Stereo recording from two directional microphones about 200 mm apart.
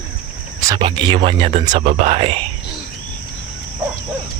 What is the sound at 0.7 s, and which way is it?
Speech, 25° right (ahead or behind).